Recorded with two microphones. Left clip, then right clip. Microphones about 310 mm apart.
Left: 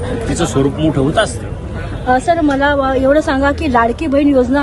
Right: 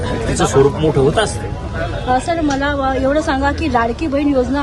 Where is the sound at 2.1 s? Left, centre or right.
Left.